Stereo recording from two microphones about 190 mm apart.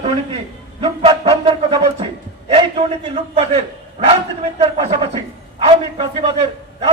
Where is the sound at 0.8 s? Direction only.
30° right (ahead or behind).